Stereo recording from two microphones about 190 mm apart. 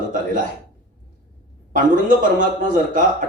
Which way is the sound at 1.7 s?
45° right (ahead or behind).